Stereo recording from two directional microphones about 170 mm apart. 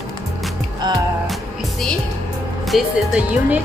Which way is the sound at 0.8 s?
25° right (ahead or behind).